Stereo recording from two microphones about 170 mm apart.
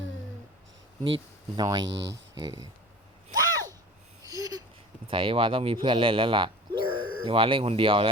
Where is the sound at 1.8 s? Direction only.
90° right.